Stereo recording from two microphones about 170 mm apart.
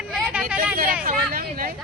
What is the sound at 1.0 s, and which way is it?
Speech, 55° right (ahead or behind).